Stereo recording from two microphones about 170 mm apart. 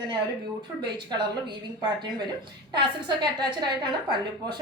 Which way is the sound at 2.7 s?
25° right (ahead or behind).